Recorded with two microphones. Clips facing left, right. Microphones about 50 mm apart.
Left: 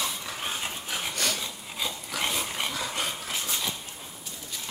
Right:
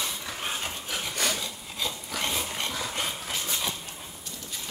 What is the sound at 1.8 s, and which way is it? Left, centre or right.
Dog, centre.